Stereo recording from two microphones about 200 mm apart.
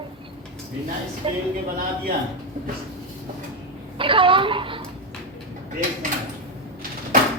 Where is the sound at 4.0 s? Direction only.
25° right (ahead or behind).